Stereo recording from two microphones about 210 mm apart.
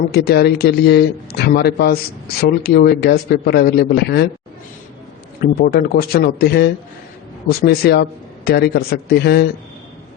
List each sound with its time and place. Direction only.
0.1 s speech: 50° left (ahead or behind)
5.4 s speech: 45° left (ahead or behind)